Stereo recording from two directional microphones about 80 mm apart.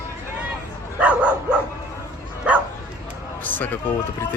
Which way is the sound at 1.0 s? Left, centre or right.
Centre.